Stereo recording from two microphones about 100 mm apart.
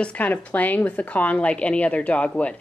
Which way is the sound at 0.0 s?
15° left (ahead or behind).